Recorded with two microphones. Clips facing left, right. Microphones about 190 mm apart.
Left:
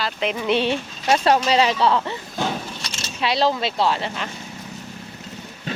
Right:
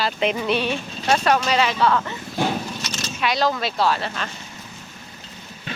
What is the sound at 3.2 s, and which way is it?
Speech, 30° left (ahead or behind).